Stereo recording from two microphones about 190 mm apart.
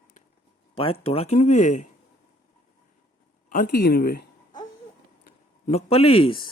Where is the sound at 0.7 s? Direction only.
30° left (ahead or behind).